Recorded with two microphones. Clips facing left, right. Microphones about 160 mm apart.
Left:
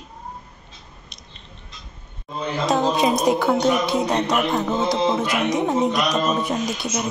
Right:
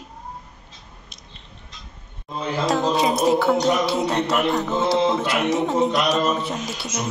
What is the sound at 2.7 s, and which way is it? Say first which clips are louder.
Speech: left 2 dB; 15° left (ahead or behind).